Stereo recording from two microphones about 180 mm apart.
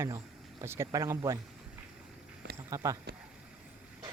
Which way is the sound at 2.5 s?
20° right (ahead or behind).